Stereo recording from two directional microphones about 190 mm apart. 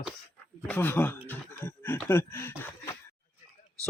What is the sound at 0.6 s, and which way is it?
Speech, 10° left (ahead or behind).